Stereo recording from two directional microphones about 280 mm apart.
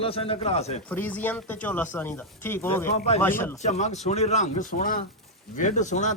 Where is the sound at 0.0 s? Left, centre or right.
Centre.